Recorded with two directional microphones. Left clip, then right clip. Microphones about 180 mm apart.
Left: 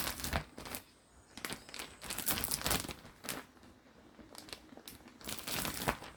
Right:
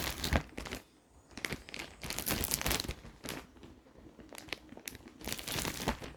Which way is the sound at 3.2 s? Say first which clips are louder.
Even; 15° right (ahead or behind).